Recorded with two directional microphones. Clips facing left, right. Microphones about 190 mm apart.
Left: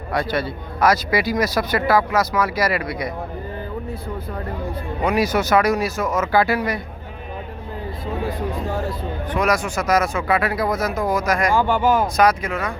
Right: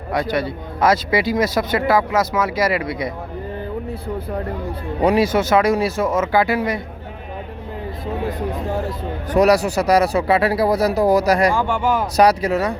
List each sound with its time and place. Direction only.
0.1 s a man's voice: 20° right (ahead or behind)
5.0 s a man's voice: 25° right (ahead or behind)
9.3 s a man's voice: 40° right (ahead or behind)
11.5 s speech: 40° left (ahead or behind)
12.1 s a man's voice: 35° right (ahead or behind)